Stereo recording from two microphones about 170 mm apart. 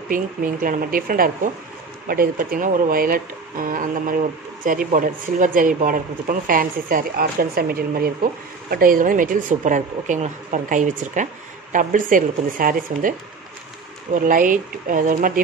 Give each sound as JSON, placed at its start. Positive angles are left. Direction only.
{"t": 0.1, "sound": "speech", "side_deg": -55}
{"t": 14.2, "sound": "speech", "side_deg": -50}